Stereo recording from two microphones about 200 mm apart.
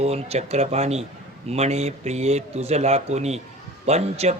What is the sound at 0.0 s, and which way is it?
A man's voice, 30° right (ahead or behind).